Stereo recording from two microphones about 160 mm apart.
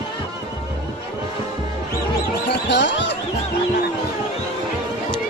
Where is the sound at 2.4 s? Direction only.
90° left.